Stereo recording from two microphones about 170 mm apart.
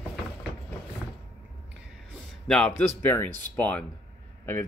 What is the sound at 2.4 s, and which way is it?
Speech, 5° left (ahead or behind).